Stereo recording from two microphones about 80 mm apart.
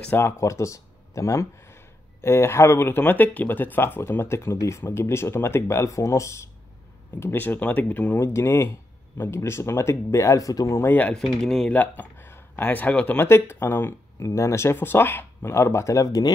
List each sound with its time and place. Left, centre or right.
0.1 s speech: left
7.2 s speech: left
8.2 s speech: left
11.1 s speech: centre
11.7 s speech: centre
13.3 s speech: left